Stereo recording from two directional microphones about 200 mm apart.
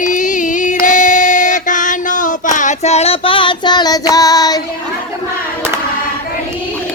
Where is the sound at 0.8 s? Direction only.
40° left (ahead or behind); by 4.6 s 20° left (ahead or behind).